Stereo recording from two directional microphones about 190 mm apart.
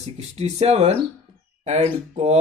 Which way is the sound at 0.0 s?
35° right (ahead or behind).